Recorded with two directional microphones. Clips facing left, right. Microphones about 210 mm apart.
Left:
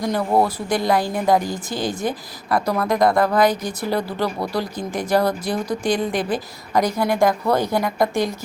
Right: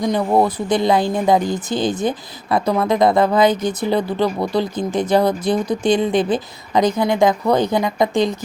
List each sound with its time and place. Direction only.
0.0 s speech: 20° right (ahead or behind)